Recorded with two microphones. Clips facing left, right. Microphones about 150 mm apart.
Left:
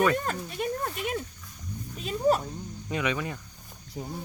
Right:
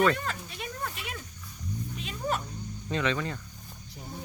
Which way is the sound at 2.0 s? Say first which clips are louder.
Left 9 dB; 40° left (ahead or behind).